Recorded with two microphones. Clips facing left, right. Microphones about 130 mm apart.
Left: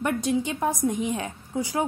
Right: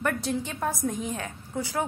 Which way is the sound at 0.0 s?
15° left (ahead or behind).